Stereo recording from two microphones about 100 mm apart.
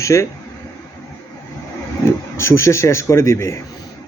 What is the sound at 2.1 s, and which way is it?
A man's voice, 25° left (ahead or behind).